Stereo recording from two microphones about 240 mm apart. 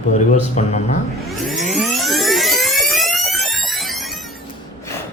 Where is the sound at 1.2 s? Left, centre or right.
Centre.